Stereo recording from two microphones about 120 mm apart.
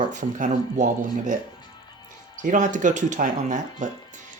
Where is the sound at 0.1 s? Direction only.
90° right.